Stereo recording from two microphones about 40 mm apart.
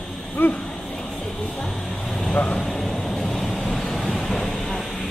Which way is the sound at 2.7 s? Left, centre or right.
Centre.